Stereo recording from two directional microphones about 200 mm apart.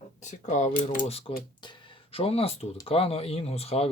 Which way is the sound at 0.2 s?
35° left (ahead or behind).